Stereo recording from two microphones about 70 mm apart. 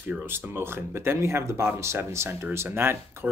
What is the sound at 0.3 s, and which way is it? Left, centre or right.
Speech, right.